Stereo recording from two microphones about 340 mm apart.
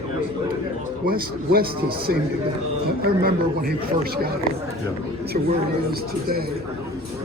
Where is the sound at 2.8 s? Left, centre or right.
Right.